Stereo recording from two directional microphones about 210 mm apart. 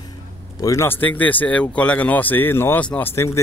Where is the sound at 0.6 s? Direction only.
15° left (ahead or behind).